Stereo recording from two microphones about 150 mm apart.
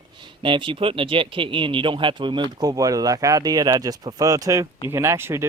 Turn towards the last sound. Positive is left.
turn(degrees=-15)  # may be behind; listen again after turning